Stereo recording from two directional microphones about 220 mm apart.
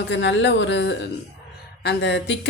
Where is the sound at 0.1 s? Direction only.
55° left (ahead or behind).